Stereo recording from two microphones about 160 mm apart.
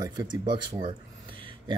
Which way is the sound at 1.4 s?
30° right (ahead or behind).